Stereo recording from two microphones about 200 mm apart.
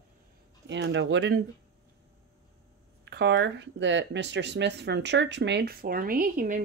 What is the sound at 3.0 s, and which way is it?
Speech, 60° right (ahead or behind).